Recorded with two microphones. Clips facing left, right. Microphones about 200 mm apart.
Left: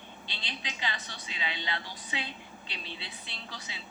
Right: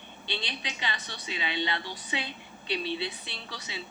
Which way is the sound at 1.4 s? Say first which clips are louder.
Right 5 dB; 70° right (ahead or behind).